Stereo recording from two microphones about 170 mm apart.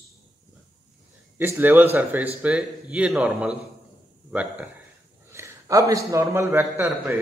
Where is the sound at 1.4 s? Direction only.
10° right (ahead or behind).